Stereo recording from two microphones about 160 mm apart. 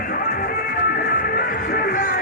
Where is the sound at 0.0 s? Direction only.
65° left (ahead or behind).